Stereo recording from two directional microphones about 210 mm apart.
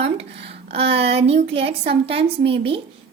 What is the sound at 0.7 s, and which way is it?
A woman's voice, 30° right (ahead or behind).